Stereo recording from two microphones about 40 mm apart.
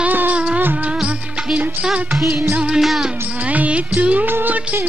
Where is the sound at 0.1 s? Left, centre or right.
Right.